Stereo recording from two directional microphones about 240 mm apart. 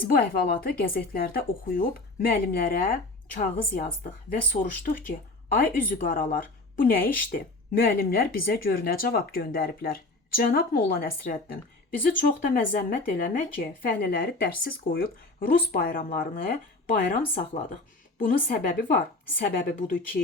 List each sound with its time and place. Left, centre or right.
0.1 s a woman's voice: left